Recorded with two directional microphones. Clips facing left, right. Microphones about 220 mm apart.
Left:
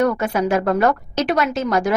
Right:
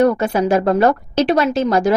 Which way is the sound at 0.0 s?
30° right (ahead or behind).